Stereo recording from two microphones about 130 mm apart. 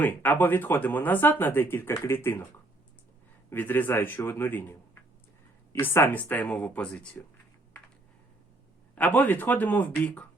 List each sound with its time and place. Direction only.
0.0 s speech: 15° left (ahead or behind)
3.5 s speech: 15° left (ahead or behind)
9.0 s speech: 10° left (ahead or behind)